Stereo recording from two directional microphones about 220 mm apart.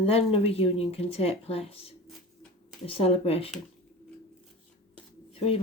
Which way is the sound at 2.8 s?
25° left (ahead or behind).